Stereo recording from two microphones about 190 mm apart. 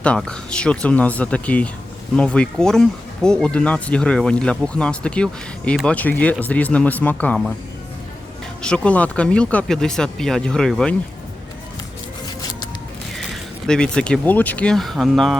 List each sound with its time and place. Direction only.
0.0 s speech: 5° left (ahead or behind)
8.6 s speech: 5° left (ahead or behind)
12.4 s zipper: 20° left (ahead or behind)
13.1 s speech: centre (ahead or behind)